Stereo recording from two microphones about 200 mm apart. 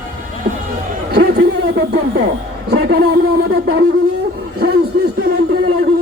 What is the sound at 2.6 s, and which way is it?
Speech, 55° right (ahead or behind).